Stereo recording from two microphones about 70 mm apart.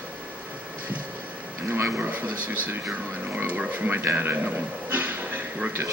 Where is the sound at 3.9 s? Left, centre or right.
Right.